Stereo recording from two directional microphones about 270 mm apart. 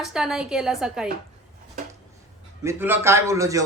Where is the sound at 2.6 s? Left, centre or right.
Centre.